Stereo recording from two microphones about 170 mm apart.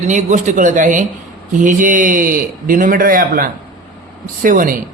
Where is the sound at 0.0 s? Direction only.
45° right (ahead or behind).